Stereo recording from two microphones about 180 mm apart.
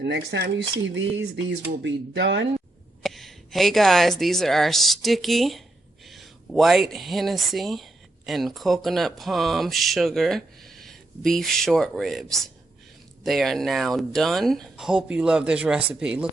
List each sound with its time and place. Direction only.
0.0 s speech: 65° right (ahead or behind)
1.5 s speech: 85° right
3.0 s speech: centre (ahead or behind)